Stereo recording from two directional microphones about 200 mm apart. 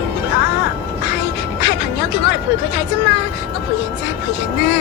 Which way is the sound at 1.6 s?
55° left (ahead or behind).